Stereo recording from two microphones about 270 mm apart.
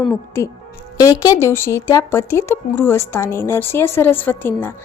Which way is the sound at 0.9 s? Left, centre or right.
Centre.